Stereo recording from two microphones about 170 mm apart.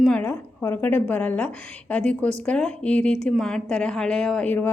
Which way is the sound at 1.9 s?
5° left (ahead or behind).